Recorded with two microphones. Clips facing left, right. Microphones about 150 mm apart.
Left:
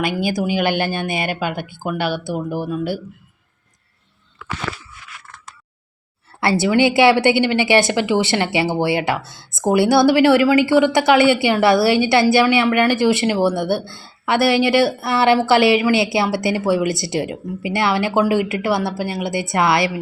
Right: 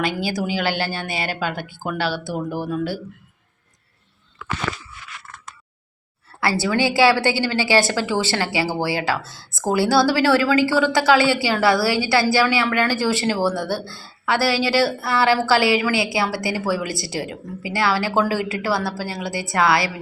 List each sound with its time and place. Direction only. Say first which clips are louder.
0.0 s speech: left 3 dB; 15° left (ahead or behind)
6.4 s a woman's voice: left 5 dB; 20° left (ahead or behind)